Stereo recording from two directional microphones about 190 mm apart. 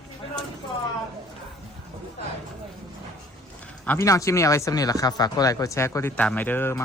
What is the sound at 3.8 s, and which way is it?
Speech, 15° left (ahead or behind).